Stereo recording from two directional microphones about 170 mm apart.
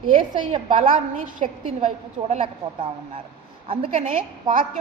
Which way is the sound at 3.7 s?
35° right (ahead or behind).